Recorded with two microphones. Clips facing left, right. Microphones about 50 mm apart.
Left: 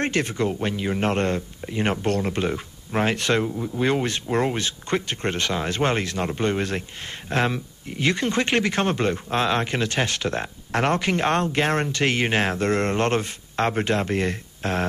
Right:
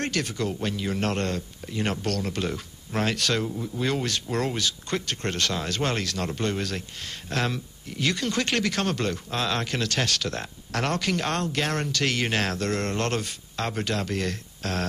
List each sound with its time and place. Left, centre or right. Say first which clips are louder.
0.0 s speech: left 5 dB; left